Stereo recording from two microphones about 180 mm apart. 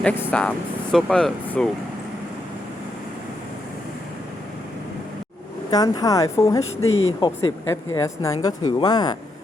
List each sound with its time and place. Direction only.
0.0 s speech: 10° left (ahead or behind)
5.7 s speech: 20° left (ahead or behind)
6.8 s speech: 90° left
7.9 s speech: 15° left (ahead or behind)